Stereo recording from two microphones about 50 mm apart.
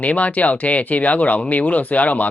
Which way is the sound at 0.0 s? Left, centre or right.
Left.